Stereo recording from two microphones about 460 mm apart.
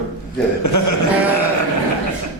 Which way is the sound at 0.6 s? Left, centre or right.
Left.